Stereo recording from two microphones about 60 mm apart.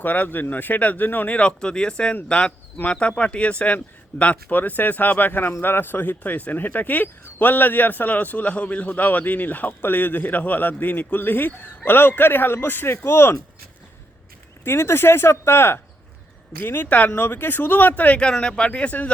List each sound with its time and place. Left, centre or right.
0.0 s speech: left
1.4 s speech: centre; by 13.3 s left
14.6 s speech: left
16.6 s speech: left
18.3 s speech: centre